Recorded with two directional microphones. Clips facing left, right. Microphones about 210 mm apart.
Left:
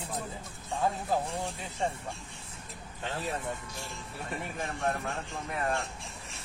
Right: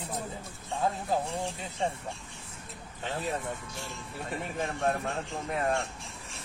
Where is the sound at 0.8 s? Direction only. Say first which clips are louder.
Even; 5° right (ahead or behind).